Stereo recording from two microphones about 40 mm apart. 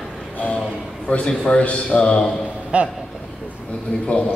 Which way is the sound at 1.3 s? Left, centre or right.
Left.